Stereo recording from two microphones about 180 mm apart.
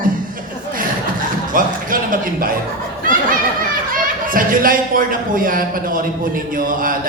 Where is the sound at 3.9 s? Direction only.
50° right (ahead or behind).